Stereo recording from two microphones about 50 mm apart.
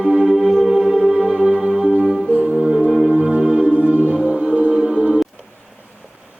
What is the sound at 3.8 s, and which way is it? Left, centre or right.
Music, right.